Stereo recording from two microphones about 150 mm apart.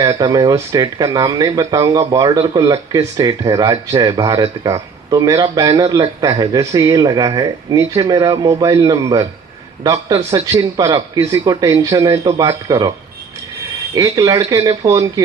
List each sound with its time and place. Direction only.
0.0 s speech: 25° right (ahead or behind)
13.9 s speech: 25° right (ahead or behind)